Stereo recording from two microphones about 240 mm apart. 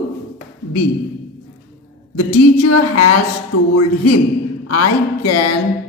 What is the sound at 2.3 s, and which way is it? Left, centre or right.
Speech, left.